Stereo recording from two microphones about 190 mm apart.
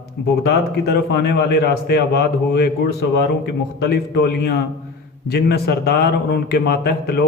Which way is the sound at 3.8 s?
55° left (ahead or behind).